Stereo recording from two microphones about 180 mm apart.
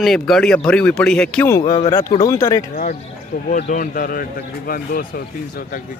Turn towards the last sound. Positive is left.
turn(degrees=55)  # may be behind; listen again after turning